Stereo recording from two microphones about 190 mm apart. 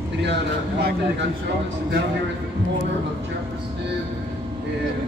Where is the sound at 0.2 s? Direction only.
60° right (ahead or behind).